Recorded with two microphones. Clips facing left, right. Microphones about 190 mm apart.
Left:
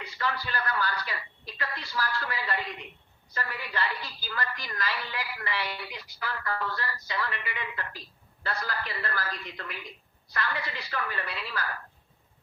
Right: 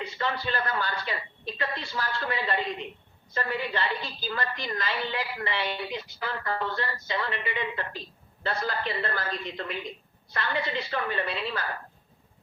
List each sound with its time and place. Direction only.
0.0 s a woman's voice: 25° right (ahead or behind)